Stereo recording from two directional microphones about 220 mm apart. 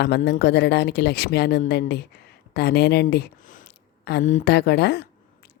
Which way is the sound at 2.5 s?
50° left (ahead or behind).